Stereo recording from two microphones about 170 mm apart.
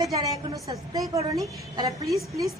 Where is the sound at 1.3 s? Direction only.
20° right (ahead or behind).